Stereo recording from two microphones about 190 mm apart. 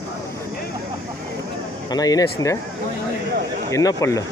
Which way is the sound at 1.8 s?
20° left (ahead or behind).